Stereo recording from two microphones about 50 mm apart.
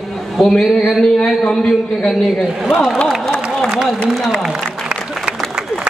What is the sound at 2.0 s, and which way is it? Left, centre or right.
A man's voice, centre.